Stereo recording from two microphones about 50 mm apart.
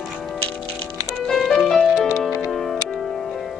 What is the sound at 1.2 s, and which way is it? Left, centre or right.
Music, centre.